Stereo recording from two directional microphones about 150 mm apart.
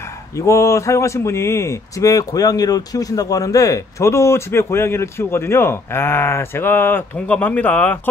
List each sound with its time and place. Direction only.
0.4 s a man's voice: 20° left (ahead or behind)